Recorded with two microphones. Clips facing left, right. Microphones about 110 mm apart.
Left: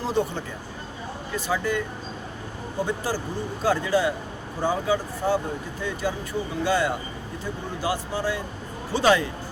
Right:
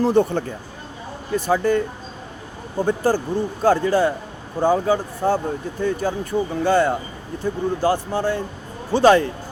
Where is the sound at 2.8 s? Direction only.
50° right (ahead or behind).